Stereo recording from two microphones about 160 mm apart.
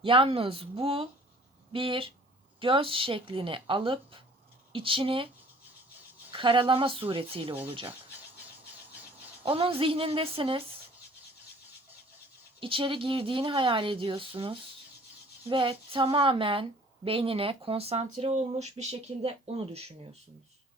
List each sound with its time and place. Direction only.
0.0 s a woman's voice: 35° right (ahead or behind)
6.3 s a woman's voice: 30° right (ahead or behind)
9.4 s a woman's voice: 35° right (ahead or behind)
12.5 s a woman's voice: 35° right (ahead or behind)